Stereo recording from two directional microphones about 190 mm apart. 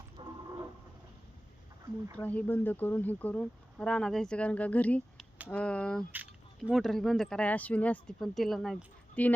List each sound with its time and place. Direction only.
0.2 s vehicle: 25° right (ahead or behind)
2.1 s speech: 10° left (ahead or behind)